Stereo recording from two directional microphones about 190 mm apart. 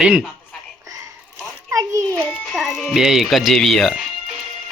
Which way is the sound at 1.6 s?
15° right (ahead or behind).